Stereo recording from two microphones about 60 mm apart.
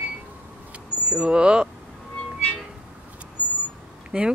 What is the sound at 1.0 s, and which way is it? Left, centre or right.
Vehicle, centre.